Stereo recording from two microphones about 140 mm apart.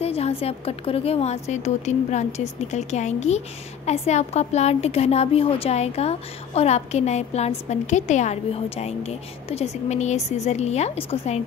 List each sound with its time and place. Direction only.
0.0 s a woman's voice: 45° left (ahead or behind)